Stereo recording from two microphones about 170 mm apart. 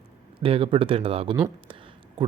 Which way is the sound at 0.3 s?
35° right (ahead or behind).